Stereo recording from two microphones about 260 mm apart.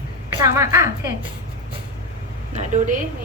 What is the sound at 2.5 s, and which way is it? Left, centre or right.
Speech, right.